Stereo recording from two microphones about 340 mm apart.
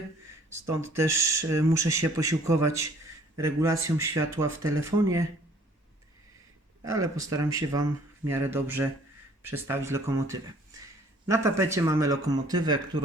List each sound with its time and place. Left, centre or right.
0.7 s speech: centre
6.8 s speech: centre